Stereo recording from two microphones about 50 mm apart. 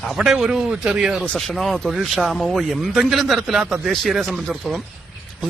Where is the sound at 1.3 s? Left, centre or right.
Centre.